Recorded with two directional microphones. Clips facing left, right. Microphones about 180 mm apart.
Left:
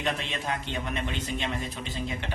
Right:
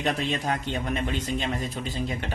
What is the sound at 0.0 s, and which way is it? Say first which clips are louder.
A man's voice: right 4 dB; 40° right (ahead or behind).